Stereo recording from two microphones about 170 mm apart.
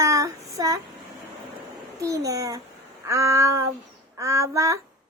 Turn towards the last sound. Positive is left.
turn(degrees=-20)  # may be behind; listen again after turning